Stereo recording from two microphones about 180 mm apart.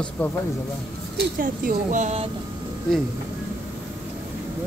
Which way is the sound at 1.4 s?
50° right (ahead or behind).